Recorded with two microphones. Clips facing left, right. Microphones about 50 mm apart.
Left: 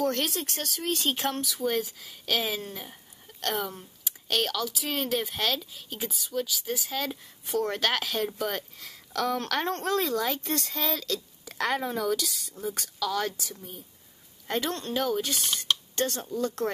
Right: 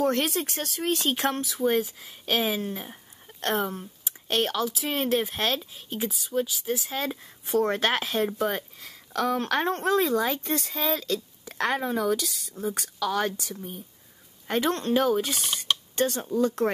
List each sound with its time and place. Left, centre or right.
0.0 s speech: centre
1.2 s speech: right; by 7.0 s centre
7.4 s speech: right; by 12.9 s centre
13.0 s speech: centre
14.5 s speech: centre